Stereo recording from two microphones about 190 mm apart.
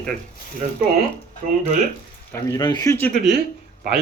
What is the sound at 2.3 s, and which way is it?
Speech, 15° left (ahead or behind).